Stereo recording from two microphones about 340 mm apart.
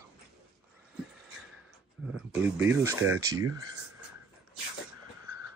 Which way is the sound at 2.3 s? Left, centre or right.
Centre.